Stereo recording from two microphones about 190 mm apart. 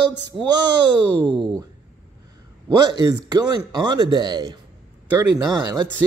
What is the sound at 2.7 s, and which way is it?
Speech, 20° right (ahead or behind).